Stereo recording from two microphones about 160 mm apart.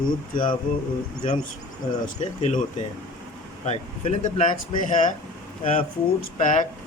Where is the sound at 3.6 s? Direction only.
50° left (ahead or behind).